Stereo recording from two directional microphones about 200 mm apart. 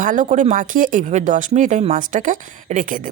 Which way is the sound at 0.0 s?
40° right (ahead or behind).